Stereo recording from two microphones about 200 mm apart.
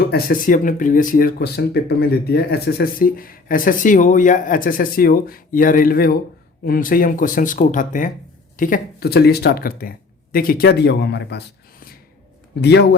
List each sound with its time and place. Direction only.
0.1 s speech: 50° left (ahead or behind)
12.6 s speech: 55° left (ahead or behind)